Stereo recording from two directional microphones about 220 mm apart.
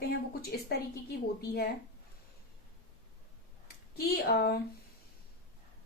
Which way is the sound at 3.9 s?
45° left (ahead or behind).